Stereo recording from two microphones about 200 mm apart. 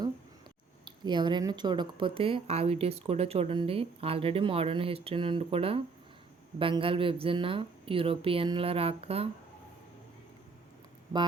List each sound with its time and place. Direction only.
0.9 s speech: 20° right (ahead or behind)